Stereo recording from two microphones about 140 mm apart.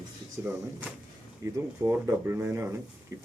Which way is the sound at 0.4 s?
10° right (ahead or behind).